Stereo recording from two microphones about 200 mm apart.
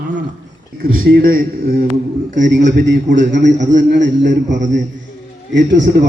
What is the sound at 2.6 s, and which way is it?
Speech, 65° right (ahead or behind).